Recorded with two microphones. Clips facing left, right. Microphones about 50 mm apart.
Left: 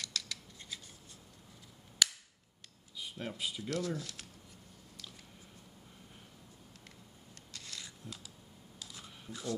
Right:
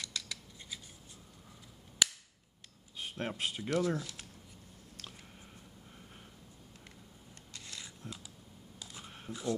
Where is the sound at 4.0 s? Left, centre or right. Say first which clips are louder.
Right 2 dB; centre.